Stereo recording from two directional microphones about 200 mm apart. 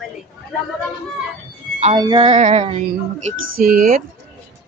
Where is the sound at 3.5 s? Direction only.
45° right (ahead or behind).